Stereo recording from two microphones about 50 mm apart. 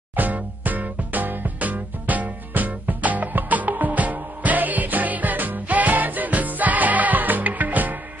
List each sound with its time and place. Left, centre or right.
0.1 s music: right